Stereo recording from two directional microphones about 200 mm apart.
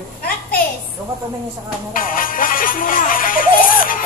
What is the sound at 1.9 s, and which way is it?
Music, 45° left (ahead or behind).